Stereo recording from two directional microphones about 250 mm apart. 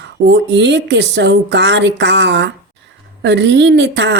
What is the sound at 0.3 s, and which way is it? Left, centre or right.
A woman's voice, right.